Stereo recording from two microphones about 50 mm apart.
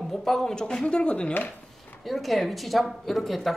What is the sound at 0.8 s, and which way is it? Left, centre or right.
Speech, left.